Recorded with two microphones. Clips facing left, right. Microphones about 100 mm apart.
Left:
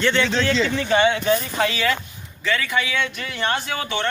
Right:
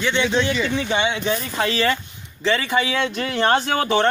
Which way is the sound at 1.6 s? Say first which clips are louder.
Right 1 dB; 30° right (ahead or behind).